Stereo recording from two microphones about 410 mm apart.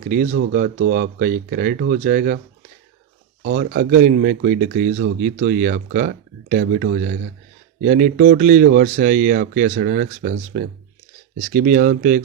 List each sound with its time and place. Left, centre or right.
0.1 s speech: centre
3.4 s speech: right